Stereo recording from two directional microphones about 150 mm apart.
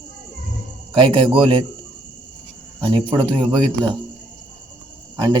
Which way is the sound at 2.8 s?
35° right (ahead or behind).